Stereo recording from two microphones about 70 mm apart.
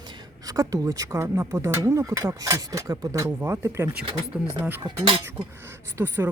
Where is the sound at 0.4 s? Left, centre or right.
Right.